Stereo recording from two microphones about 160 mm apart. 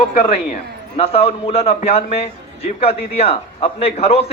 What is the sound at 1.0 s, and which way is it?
A man's voice, 40° left (ahead or behind).